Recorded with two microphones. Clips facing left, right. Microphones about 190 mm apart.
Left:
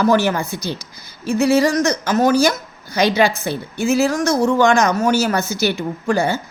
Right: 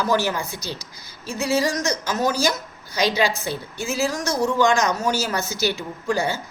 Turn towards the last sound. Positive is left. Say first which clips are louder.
# left 5 dB
turn(degrees=55)  # may be behind; listen again after turning